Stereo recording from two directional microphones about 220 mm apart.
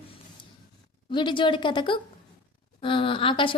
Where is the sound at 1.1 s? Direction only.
20° left (ahead or behind).